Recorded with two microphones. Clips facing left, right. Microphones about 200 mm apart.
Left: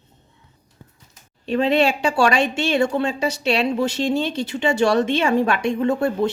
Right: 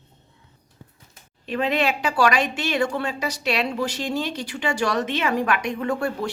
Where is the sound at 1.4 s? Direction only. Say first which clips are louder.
Left 5 dB; 30° left (ahead or behind).